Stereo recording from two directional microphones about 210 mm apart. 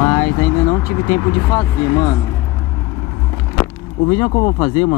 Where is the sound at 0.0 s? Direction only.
10° left (ahead or behind).